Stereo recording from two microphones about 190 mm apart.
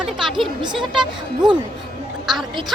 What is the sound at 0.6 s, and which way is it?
Speech, 25° right (ahead or behind).